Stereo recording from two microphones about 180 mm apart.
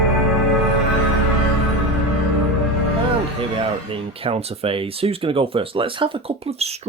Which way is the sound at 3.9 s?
30° right (ahead or behind).